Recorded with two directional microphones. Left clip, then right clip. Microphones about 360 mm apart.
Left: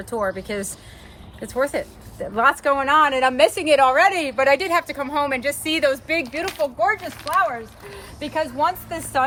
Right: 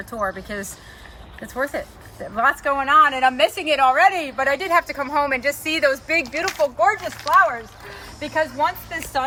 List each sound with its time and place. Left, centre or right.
0.0 s a woman's voice: centre
4.7 s speech: centre